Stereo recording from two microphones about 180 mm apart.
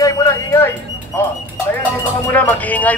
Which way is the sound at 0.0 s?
20° left (ahead or behind).